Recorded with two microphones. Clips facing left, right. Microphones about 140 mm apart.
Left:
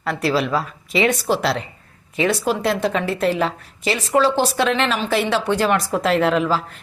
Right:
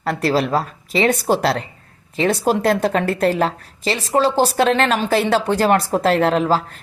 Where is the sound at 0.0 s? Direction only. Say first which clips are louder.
Right 2 dB; 40° right (ahead or behind).